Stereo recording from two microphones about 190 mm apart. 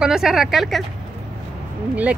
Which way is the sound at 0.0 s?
5° right (ahead or behind).